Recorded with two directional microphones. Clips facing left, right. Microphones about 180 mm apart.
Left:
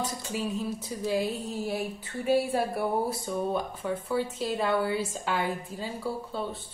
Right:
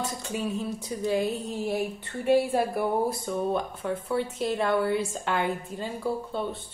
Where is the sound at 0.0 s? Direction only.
5° left (ahead or behind).